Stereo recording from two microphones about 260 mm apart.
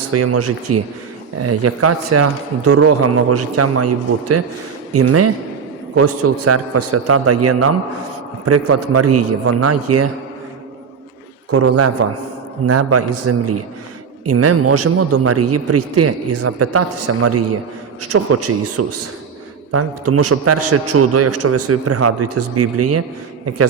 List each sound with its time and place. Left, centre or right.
0.1 s a man's voice: right
4.9 s a man's voice: right
12.6 s a man's voice: right